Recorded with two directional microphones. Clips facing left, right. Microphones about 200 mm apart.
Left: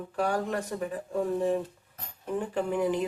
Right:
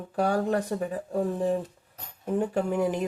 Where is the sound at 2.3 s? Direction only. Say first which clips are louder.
Right 3 dB; 45° right (ahead or behind).